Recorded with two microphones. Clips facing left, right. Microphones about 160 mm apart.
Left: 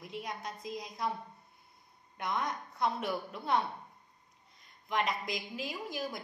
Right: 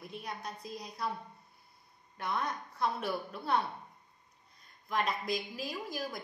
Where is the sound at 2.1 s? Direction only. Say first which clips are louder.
Even; 15° left (ahead or behind).